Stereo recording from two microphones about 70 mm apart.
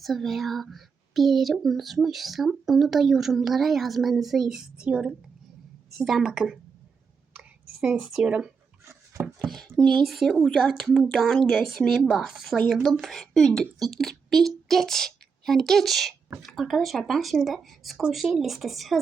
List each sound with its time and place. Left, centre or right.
0.0 s speech: centre
6.1 s speech: centre
7.9 s speech: centre
9.4 s a woman's voice: centre